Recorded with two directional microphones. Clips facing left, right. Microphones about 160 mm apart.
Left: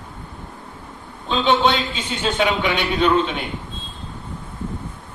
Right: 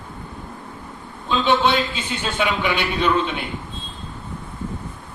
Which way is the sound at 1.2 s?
20° left (ahead or behind).